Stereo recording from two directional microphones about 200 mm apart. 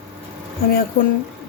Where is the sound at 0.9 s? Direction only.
50° left (ahead or behind).